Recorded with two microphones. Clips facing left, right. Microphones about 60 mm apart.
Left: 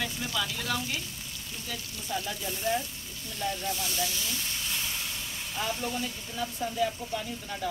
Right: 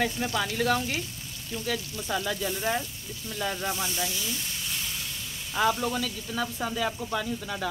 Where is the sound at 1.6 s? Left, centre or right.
Right.